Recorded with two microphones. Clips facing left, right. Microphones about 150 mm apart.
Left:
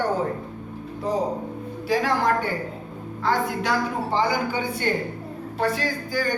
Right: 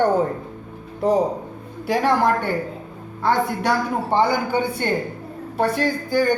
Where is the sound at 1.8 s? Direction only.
60° right (ahead or behind).